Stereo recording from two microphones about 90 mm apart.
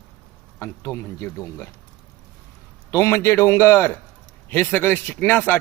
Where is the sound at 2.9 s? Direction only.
30° left (ahead or behind).